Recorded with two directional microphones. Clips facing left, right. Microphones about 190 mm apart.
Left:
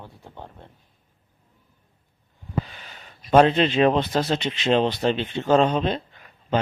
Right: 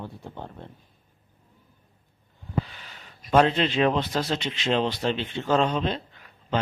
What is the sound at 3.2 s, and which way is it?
A man's voice, 25° left (ahead or behind).